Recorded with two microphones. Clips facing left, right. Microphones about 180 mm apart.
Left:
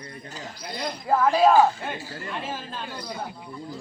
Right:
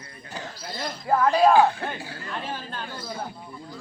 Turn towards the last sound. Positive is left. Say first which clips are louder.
# even
turn(degrees=15)  # may be behind; listen again after turning